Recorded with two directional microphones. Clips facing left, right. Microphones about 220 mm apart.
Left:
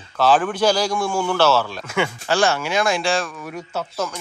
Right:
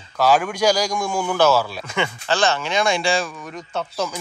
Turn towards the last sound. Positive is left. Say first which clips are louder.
# right 1 dB
turn(degrees=0)  # may be behind; listen again after turning